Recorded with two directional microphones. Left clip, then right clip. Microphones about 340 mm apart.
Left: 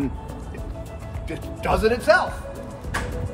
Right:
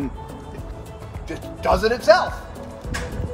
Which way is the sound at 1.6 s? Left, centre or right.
Centre.